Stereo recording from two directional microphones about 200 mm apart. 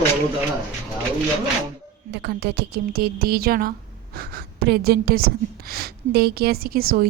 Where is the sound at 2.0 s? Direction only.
55° right (ahead or behind).